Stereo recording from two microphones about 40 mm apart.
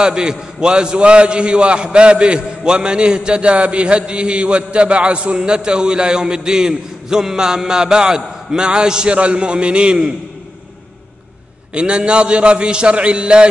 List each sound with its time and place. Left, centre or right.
0.0 s a man's voice: centre
11.7 s a man's voice: right